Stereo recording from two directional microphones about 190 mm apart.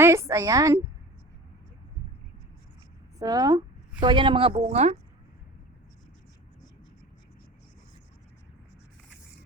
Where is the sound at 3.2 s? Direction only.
20° right (ahead or behind).